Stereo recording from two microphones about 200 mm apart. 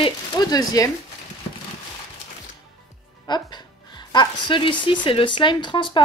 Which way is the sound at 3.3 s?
20° left (ahead or behind).